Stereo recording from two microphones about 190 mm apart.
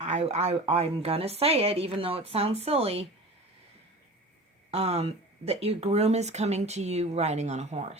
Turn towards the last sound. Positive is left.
turn(degrees=-35)  # may be behind; listen again after turning